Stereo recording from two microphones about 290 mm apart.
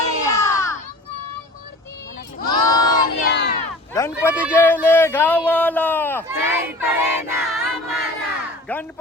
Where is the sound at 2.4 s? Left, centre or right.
Centre.